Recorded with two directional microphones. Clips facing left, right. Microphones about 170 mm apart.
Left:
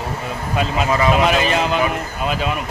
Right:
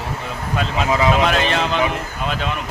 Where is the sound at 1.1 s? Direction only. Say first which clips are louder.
Left 1 dB; 5° left (ahead or behind).